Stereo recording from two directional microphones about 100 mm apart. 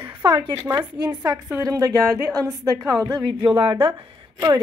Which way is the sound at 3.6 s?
60° right (ahead or behind).